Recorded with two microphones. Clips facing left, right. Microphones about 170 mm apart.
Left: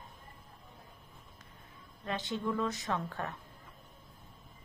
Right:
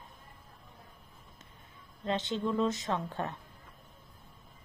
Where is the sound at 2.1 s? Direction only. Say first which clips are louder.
Right 3 dB; 25° right (ahead or behind).